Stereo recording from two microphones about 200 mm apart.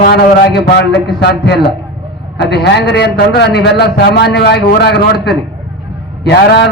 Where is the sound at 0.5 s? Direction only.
55° left (ahead or behind).